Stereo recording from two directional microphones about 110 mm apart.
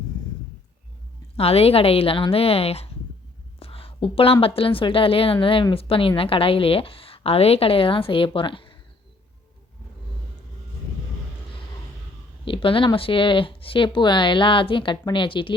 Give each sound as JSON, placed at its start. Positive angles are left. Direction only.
{"t": 1.4, "sound": "a woman's voice", "side_deg": 65}
{"t": 12.5, "sound": "speech", "side_deg": 55}